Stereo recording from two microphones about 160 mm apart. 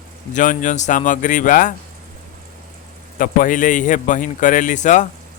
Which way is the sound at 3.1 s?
60° left (ahead or behind).